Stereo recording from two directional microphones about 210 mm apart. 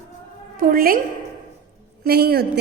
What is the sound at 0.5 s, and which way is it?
Speech, 40° right (ahead or behind).